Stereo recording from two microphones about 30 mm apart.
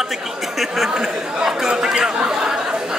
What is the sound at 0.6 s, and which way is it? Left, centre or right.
Speech, centre.